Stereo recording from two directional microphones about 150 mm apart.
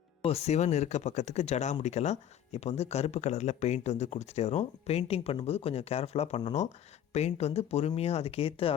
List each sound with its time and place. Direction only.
0.3 s speech: 45° left (ahead or behind)